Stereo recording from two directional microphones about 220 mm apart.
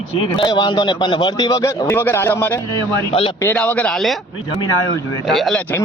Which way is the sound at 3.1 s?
25° left (ahead or behind).